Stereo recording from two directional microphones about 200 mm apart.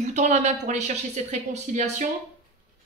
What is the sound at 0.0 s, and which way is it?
Speech, 35° right (ahead or behind).